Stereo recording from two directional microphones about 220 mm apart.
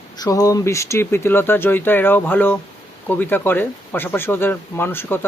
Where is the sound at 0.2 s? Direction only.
15° left (ahead or behind).